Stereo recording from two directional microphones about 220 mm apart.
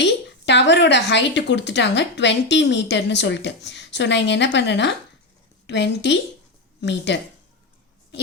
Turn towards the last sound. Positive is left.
turn(degrees=50)  # may be behind; listen again after turning